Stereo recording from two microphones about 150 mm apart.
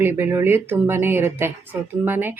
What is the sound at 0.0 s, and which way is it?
Speech, 15° right (ahead or behind).